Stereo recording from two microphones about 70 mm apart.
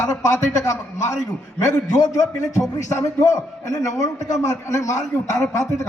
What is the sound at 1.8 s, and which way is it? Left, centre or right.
Speech, left.